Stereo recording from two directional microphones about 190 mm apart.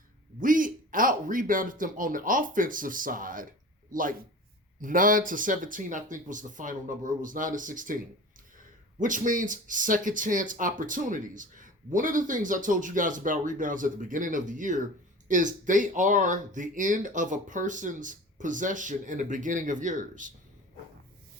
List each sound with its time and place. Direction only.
0.3 s speech: 45° right (ahead or behind)
4.8 s speech: 45° right (ahead or behind)